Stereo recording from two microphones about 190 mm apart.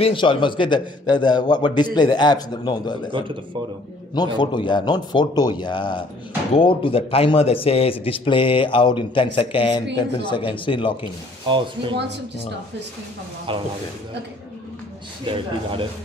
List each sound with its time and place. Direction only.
0.0 s speech: 25° left (ahead or behind)
3.1 s speech: 25° right (ahead or behind)
4.4 s speech: 25° left (ahead or behind)
11.4 s speech: 25° right (ahead or behind)
13.5 s speech: 25° right (ahead or behind)
15.2 s speech: 25° right (ahead or behind)